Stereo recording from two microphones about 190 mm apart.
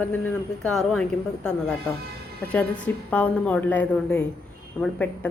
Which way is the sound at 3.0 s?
5° left (ahead or behind).